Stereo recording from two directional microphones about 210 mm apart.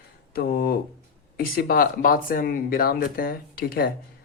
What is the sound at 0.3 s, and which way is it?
Speech, 45° left (ahead or behind).